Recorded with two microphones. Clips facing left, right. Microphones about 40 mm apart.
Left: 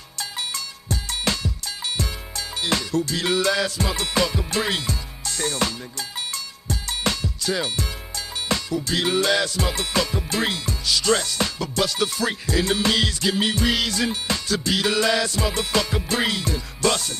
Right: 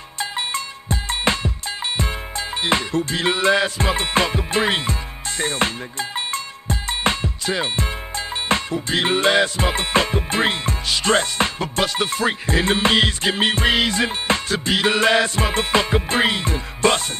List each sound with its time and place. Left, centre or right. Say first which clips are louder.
0.2 s music: right 5 dB; right